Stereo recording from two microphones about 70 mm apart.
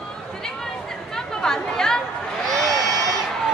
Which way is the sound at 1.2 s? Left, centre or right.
Centre.